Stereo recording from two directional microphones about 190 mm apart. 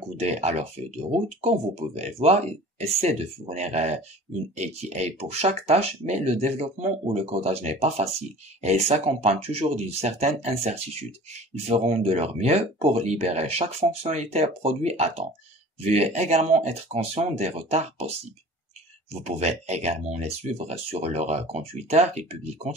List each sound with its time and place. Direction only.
0.2 s speech: 35° right (ahead or behind)
19.2 s speech: 35° right (ahead or behind)